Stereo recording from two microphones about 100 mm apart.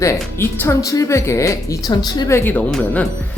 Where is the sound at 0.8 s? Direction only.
35° left (ahead or behind).